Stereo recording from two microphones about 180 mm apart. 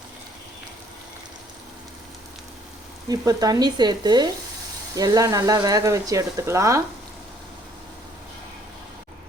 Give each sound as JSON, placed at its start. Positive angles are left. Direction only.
{"t": 3.1, "sound": "speech", "side_deg": -20}